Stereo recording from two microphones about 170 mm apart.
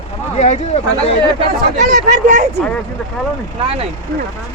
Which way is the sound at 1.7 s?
50° right (ahead or behind).